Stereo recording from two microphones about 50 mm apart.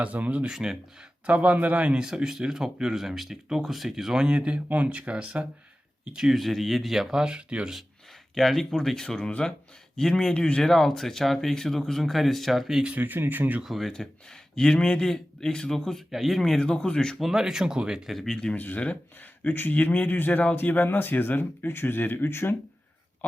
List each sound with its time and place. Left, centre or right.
0.0 s speech: right
0.5 s speech: centre
1.3 s speech: right
2.0 s speech: centre
4.4 s speech: right
6.1 s speech: centre
8.4 s speech: centre
12.8 s speech: right
13.7 s speech: centre
13.9 s speech: centre
16.1 s speech: centre
16.4 s speech: centre
17.2 s speech: centre
18.5 s speech: left